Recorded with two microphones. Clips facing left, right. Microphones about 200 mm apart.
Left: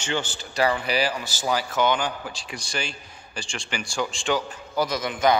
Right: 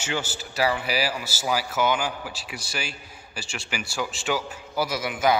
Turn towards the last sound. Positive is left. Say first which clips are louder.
# left 1 dB
turn(degrees=-5)  # may be behind; listen again after turning